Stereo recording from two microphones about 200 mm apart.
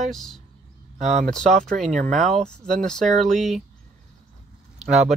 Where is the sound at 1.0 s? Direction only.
35° right (ahead or behind).